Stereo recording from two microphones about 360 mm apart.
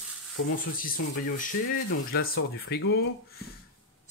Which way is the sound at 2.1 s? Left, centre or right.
Left.